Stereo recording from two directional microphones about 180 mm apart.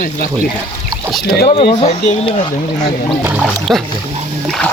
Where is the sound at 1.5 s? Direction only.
35° left (ahead or behind).